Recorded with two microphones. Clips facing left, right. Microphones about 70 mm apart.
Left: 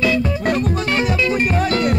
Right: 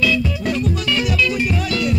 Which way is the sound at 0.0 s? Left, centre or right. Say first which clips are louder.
Left 1 dB; left.